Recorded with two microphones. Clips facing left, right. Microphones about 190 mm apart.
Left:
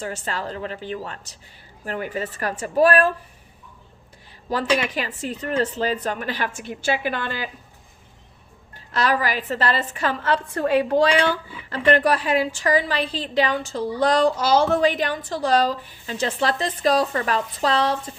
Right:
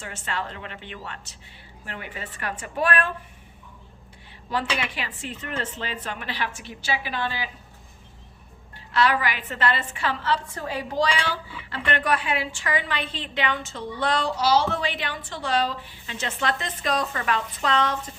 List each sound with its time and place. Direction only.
0.0 s a woman's voice: 40° left (ahead or behind)
4.4 s a woman's voice: 40° left (ahead or behind)
8.9 s a woman's voice: 40° left (ahead or behind)